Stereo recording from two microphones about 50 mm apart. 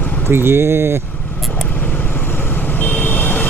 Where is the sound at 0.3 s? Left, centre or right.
Right.